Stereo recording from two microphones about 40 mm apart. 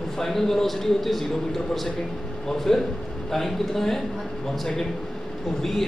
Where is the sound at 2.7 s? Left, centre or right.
Centre.